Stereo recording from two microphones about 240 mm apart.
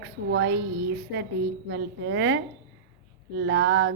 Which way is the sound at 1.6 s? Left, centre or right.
Right.